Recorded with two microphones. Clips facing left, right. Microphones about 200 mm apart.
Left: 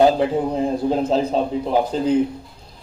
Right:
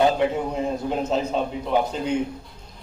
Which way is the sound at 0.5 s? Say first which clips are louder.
Left 5 dB; 35° left (ahead or behind).